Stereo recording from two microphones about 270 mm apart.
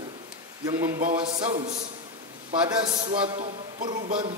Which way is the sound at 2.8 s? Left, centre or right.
Centre.